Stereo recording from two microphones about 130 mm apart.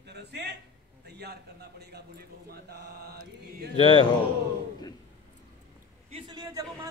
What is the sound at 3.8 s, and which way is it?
Speech, 45° left (ahead or behind).